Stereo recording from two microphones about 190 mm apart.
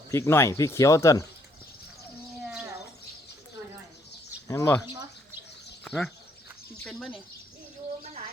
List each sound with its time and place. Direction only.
0.1 s speech: 15° left (ahead or behind)
4.4 s speech: 15° left (ahead or behind)
5.8 s a sound: centre (ahead or behind)